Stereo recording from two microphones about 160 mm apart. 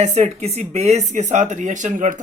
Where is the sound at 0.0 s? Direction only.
45° right (ahead or behind).